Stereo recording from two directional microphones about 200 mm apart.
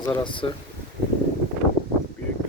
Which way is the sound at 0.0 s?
20° left (ahead or behind).